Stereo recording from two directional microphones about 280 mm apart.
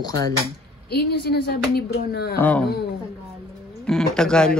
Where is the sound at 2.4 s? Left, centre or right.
Centre.